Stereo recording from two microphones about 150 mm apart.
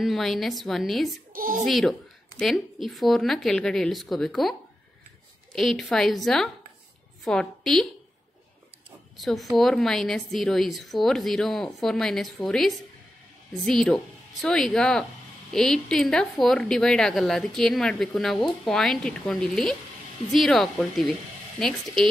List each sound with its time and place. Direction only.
0.0 s a woman's voice: centre (ahead or behind)
1.3 s a child's voice: 65° right (ahead or behind)
1.7 s a woman's voice: centre (ahead or behind)
9.1 s a woman's voice: centre (ahead or behind)